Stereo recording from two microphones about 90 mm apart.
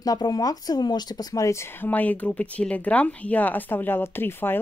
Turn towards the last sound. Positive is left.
turn(degrees=25)  # may be behind; listen again after turning